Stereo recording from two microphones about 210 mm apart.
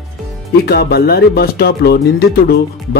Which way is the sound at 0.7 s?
50° left (ahead or behind).